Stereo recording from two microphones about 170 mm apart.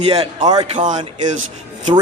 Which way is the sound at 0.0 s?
35° right (ahead or behind).